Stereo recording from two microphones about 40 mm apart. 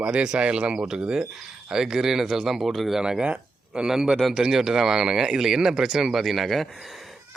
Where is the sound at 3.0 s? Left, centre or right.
Right.